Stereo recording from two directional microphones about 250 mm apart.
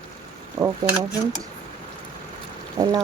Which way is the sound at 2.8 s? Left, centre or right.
Centre.